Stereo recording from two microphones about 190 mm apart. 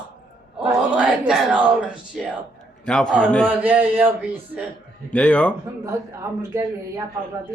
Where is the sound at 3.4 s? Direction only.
10° right (ahead or behind).